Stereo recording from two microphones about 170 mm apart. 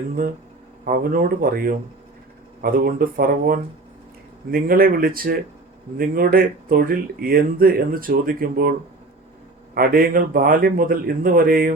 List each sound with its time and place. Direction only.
0.9 s speech: 55° right (ahead or behind)
9.7 s speech: 60° right (ahead or behind)